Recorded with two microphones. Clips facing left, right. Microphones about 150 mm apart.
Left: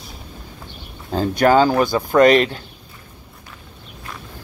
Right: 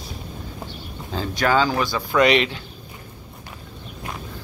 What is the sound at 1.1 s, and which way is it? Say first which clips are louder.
Speech: left 6 dB; 45° left (ahead or behind).